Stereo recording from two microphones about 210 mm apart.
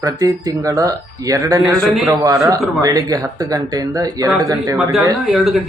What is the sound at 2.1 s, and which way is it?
Speech, 15° right (ahead or behind).